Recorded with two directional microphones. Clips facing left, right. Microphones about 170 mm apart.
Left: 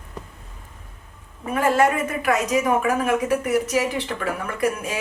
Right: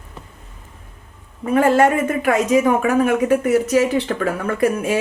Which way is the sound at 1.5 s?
25° right (ahead or behind).